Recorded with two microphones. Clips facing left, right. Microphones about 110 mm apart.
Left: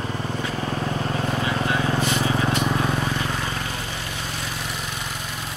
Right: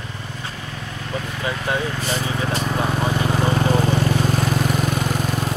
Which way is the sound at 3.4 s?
40° right (ahead or behind).